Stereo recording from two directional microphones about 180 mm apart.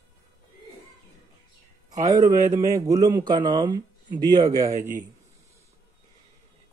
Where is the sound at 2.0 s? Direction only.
20° right (ahead or behind).